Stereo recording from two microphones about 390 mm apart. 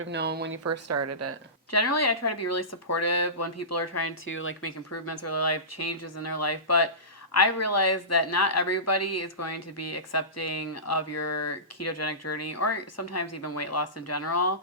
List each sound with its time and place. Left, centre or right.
0.0 s speech: right
1.7 s speech: left